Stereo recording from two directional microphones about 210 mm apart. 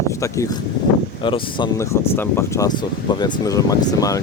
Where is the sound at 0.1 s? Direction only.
15° left (ahead or behind).